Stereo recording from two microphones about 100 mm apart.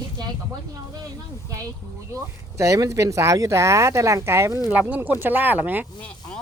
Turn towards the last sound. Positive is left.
turn(degrees=-20)  # may be behind; listen again after turning